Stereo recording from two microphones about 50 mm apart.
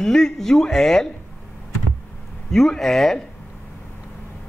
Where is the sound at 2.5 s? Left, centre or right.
Centre.